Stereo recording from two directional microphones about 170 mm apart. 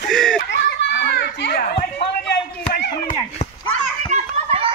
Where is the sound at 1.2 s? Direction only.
75° left (ahead or behind).